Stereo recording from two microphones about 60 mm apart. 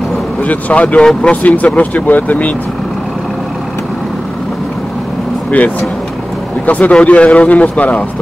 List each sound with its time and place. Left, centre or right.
0.4 s speech: left
1.7 s speech: left
5.5 s speech: left